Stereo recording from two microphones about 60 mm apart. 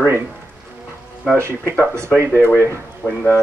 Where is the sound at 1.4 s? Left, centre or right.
Right.